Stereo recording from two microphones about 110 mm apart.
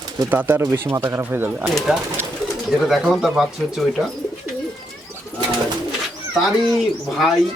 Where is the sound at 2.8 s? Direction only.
Centre (ahead or behind).